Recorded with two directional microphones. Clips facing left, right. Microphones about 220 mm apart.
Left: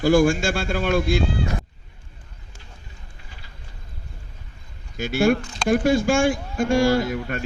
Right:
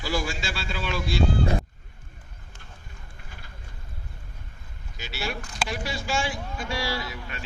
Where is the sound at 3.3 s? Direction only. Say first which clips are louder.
Right 1 dB; 50° right (ahead or behind).